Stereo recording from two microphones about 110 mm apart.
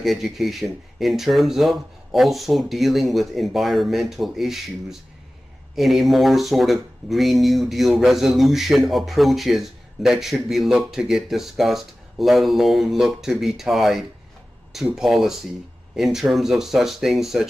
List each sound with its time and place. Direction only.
0.0 s speech: centre (ahead or behind)